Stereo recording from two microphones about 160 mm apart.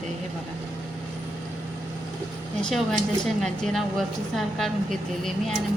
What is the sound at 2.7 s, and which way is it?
Speech, 5° left (ahead or behind).